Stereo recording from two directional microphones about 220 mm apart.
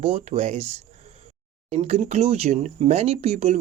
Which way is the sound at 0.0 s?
25° right (ahead or behind).